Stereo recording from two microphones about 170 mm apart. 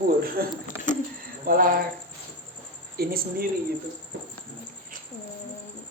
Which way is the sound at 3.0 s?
60° right (ahead or behind).